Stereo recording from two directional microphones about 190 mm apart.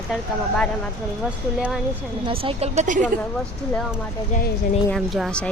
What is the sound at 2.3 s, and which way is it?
Speech, 30° right (ahead or behind).